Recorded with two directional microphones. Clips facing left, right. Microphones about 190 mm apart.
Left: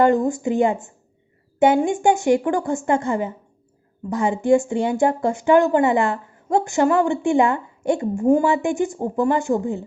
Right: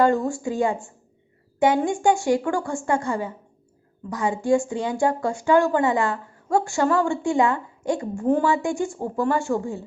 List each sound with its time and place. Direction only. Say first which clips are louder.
0.0 s a woman's voice: left 3 dB; 20° left (ahead or behind)